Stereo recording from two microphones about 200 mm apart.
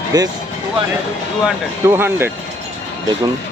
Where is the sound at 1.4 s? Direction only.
10° right (ahead or behind).